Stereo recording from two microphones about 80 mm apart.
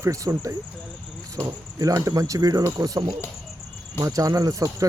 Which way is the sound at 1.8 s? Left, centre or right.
Right.